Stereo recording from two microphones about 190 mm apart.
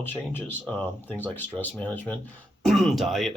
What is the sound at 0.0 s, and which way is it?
Speech, 10° left (ahead or behind).